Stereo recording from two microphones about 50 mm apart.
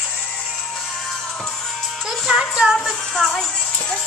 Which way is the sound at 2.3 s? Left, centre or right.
Centre.